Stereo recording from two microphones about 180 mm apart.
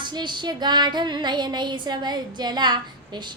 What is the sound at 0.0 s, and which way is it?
Speech, 25° right (ahead or behind).